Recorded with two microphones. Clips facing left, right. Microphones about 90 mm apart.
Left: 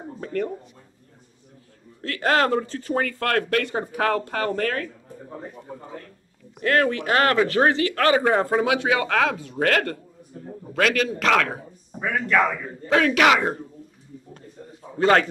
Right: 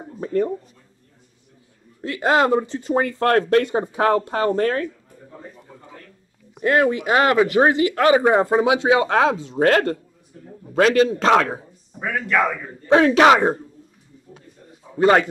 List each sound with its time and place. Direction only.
0.2 s speech: 20° right (ahead or behind)
2.0 s speech: 15° right (ahead or behind)
6.6 s speech: 20° right (ahead or behind)
12.0 s speech: centre (ahead or behind)
12.6 s speech: 25° right (ahead or behind)
15.0 s speech: 15° right (ahead or behind)